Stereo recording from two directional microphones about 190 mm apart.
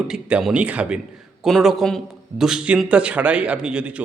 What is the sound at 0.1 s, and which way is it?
A man's voice, 5° right (ahead or behind).